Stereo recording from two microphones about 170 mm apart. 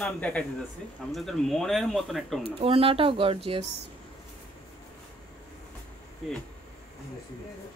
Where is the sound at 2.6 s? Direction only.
35° right (ahead or behind).